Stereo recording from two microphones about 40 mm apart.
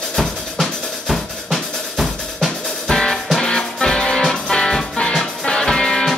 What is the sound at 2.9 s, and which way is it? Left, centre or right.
Music, centre.